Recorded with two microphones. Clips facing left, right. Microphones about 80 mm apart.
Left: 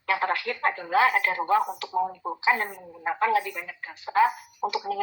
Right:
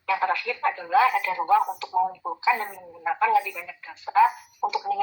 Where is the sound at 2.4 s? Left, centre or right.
Left.